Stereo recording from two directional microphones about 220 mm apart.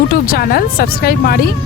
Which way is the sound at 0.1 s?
45° left (ahead or behind).